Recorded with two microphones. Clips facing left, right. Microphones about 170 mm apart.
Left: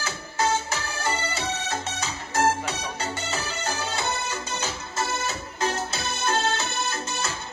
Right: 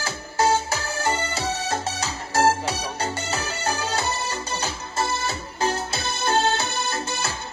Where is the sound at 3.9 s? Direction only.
35° right (ahead or behind).